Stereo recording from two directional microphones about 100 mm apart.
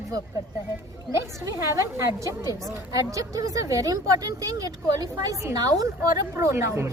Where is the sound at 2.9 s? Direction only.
35° right (ahead or behind).